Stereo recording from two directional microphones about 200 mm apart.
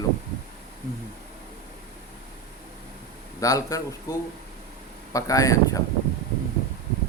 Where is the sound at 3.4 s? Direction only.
15° left (ahead or behind).